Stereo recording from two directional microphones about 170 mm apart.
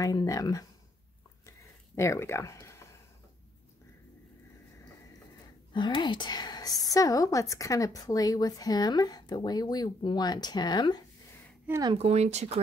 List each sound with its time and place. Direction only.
0.0 s a woman's voice: 20° left (ahead or behind)
2.0 s speech: 15° left (ahead or behind)
5.7 s a woman's voice: 25° left (ahead or behind)
11.8 s speech: 35° right (ahead or behind)